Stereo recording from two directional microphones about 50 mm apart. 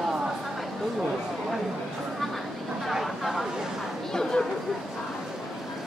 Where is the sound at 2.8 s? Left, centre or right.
Centre.